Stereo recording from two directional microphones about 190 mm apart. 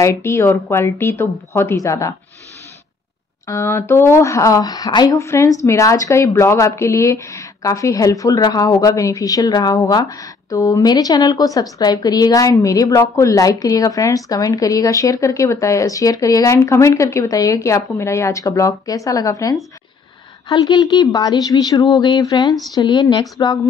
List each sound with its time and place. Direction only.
0.0 s speech: 15° left (ahead or behind)
3.4 s a woman's voice: 15° left (ahead or behind)